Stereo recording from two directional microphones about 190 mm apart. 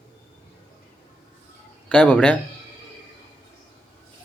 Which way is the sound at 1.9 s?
5° left (ahead or behind).